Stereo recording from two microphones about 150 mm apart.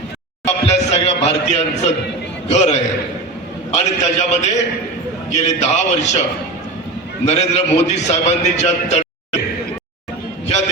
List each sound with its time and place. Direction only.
0.4 s a man's voice: 45° left (ahead or behind)
7.3 s a man's voice: 50° left (ahead or behind)